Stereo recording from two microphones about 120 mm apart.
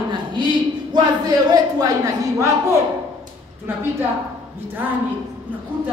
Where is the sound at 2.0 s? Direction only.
25° right (ahead or behind).